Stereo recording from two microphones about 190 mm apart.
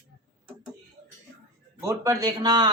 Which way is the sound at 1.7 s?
15° right (ahead or behind).